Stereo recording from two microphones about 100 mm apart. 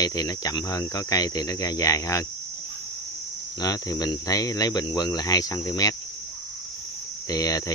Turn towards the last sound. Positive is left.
turn(degrees=35)  # may be behind; listen again after turning